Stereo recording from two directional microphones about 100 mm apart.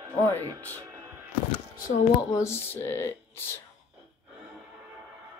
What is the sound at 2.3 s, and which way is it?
Speech, 25° left (ahead or behind).